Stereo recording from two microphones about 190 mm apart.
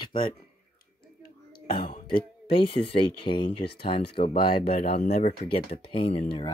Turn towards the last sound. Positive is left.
turn(degrees=30)  # may be behind; listen again after turning